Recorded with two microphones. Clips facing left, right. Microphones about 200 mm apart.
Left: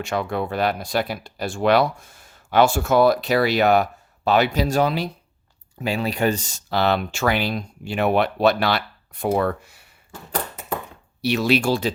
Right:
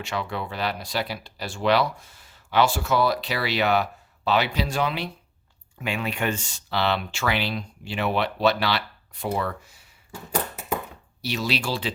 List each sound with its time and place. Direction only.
0.0 s speech: 50° left (ahead or behind)
11.2 s speech: 60° left (ahead or behind)